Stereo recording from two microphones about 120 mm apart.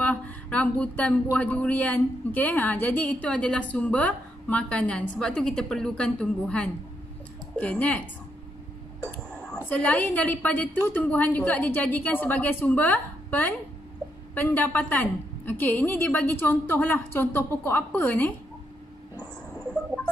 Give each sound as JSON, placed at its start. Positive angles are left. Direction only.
{"t": 0.0, "sound": "speech", "side_deg": 10}
{"t": 9.1, "sound": "speech", "side_deg": 10}